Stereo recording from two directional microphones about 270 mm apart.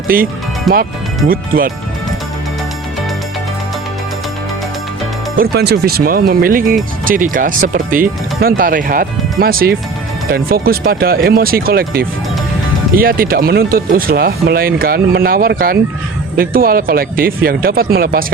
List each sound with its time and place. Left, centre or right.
0.1 s speech: right
0.7 s speech: centre
1.3 s speech: right
5.4 s speech: right